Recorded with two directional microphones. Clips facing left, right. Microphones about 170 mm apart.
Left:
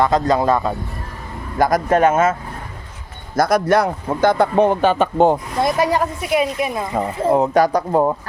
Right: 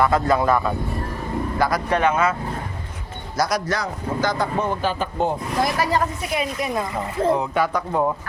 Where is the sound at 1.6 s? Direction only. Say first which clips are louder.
Left 6 dB; 45° left (ahead or behind).